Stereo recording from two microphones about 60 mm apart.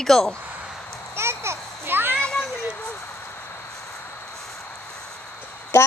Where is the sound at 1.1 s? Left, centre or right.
Right.